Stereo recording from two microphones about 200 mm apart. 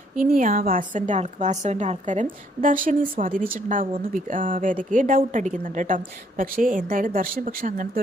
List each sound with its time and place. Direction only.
0.2 s speech: 45° right (ahead or behind)